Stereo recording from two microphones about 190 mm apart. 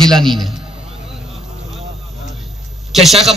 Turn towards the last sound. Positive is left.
turn(degrees=0)  # may be behind; listen again after turning